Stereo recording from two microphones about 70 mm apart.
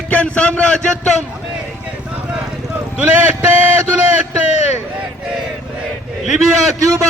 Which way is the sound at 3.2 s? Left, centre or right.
Right.